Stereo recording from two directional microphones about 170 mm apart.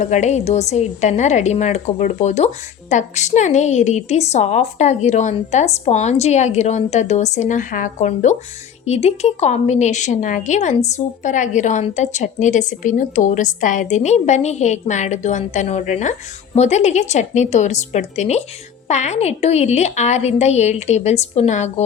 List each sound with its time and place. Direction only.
0.0 s a woman's voice: 45° left (ahead or behind)